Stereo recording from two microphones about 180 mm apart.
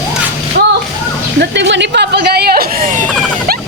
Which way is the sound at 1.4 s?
80° right.